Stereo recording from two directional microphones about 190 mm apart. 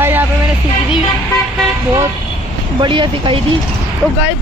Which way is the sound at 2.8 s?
25° right (ahead or behind).